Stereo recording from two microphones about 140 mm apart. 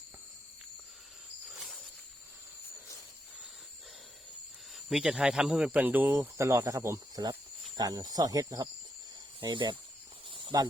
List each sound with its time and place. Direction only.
1.5 s a sound: 5° right (ahead or behind)
4.9 s speech: 5° right (ahead or behind); by 9.7 s 35° right (ahead or behind)
10.2 s snake: 35° right (ahead or behind)